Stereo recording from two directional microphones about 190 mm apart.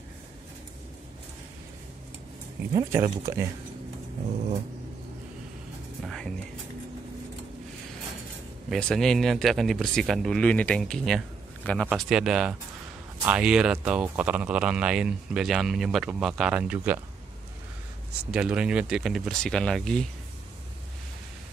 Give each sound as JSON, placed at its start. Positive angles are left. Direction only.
{"t": 2.7, "sound": "speech", "side_deg": -15}
{"t": 6.0, "sound": "music", "side_deg": 5}
{"t": 8.6, "sound": "speech", "side_deg": 0}
{"t": 18.3, "sound": "speech", "side_deg": -5}